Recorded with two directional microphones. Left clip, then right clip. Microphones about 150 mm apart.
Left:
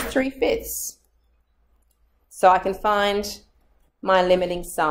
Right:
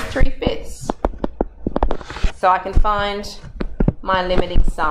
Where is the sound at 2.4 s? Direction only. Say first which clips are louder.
Even; 25° left (ahead or behind).